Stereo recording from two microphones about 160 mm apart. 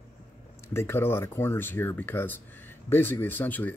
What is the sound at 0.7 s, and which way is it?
Speech, 15° left (ahead or behind).